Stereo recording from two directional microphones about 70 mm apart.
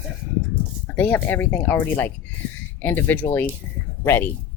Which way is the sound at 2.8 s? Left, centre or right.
Left.